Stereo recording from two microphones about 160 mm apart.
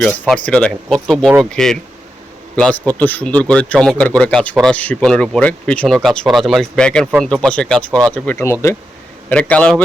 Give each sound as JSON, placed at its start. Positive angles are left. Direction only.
{"t": 0.0, "sound": "speech", "side_deg": 5}